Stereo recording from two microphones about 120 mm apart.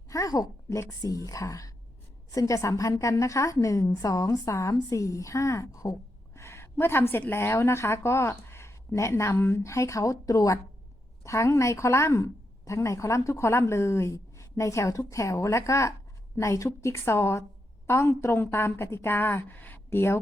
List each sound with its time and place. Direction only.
0.1 s a woman's voice: 30° left (ahead or behind)